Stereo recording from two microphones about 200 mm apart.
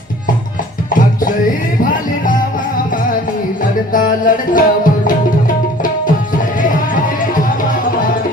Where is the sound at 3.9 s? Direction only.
40° left (ahead or behind).